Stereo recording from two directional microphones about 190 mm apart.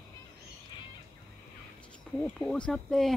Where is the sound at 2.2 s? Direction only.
5° left (ahead or behind).